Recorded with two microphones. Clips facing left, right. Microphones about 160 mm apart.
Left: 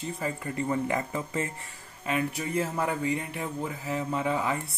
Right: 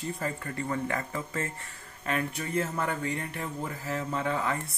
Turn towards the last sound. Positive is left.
turn(degrees=10)  # may be behind; listen again after turning